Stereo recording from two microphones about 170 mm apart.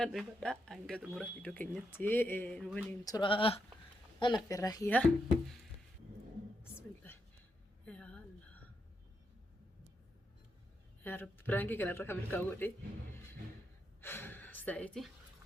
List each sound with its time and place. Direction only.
0.0 s speech: centre (ahead or behind)
1.4 s speech: 10° left (ahead or behind)
3.0 s speech: 25° left (ahead or behind)
4.9 s speech: 5° left (ahead or behind)
6.6 s whispering: 10° left (ahead or behind)
7.9 s a sound: 5° left (ahead or behind)
11.0 s speech: 10° left (ahead or behind)
14.0 s gasp: 10° left (ahead or behind)